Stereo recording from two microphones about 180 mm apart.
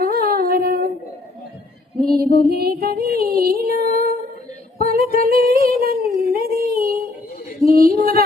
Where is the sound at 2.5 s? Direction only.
60° right (ahead or behind).